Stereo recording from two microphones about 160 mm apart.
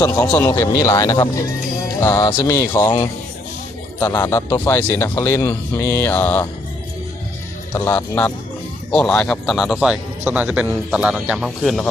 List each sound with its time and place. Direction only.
0.0 s a man's voice: 15° left (ahead or behind)
7.7 s a man's voice: 10° left (ahead or behind)